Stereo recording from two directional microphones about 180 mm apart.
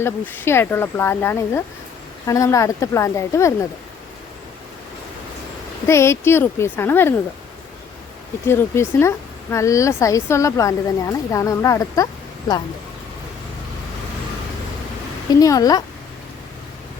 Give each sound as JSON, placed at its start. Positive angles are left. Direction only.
{"t": 0.0, "sound": "a woman's voice", "side_deg": 10}
{"t": 5.8, "sound": "a woman's voice", "side_deg": 15}
{"t": 8.4, "sound": "a woman's voice", "side_deg": 15}
{"t": 15.4, "sound": "a woman's voice", "side_deg": 20}